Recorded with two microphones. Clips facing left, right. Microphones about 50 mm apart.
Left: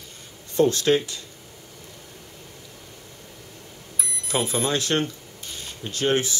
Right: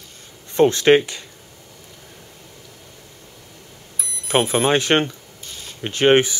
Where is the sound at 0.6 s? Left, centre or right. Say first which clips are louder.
Right 6 dB; right.